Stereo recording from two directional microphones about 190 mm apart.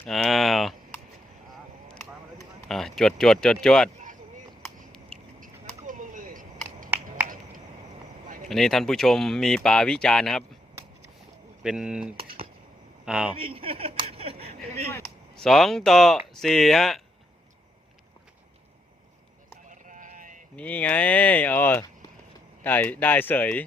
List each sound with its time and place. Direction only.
0.0 s a sound: centre (ahead or behind)
1.9 s a sound: 5° left (ahead or behind)
3.9 s a sound: 40° right (ahead or behind)
8.4 s speech: centre (ahead or behind)
11.6 s a man's voice: 5° right (ahead or behind)
13.3 s chuckle: 30° right (ahead or behind)
15.4 s speech: centre (ahead or behind)
19.6 s sheep: 40° right (ahead or behind)
20.6 s speech: 10° left (ahead or behind)